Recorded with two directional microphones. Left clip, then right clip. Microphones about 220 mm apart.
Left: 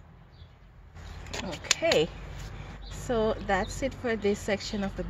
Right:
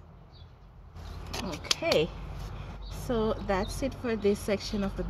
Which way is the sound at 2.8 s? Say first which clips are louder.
Left 2 dB; 25° left (ahead or behind).